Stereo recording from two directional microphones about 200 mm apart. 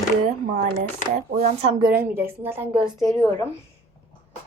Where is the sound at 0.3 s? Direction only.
35° right (ahead or behind).